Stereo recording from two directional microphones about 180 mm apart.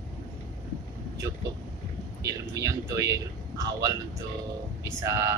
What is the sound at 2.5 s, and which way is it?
Speech, 15° right (ahead or behind).